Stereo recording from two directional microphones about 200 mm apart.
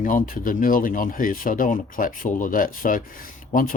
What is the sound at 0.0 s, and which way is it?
Speech, 40° left (ahead or behind).